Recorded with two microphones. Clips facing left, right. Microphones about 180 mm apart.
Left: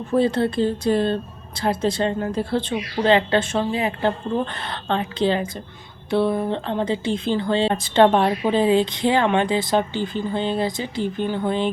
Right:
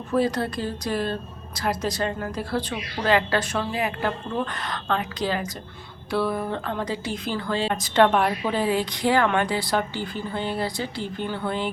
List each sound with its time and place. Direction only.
0.1 s speech: 25° left (ahead or behind)